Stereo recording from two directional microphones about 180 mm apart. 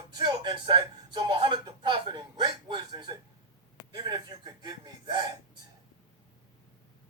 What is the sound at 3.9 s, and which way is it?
Gasp, 25° right (ahead or behind).